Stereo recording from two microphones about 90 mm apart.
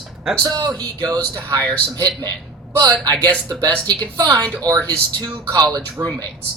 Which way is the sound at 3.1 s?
50° right (ahead or behind).